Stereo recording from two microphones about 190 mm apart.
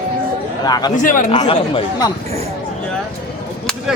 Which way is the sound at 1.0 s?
45° left (ahead or behind).